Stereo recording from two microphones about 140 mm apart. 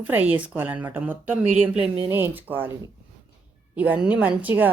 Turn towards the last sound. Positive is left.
turn(degrees=-10)  # may be behind; listen again after turning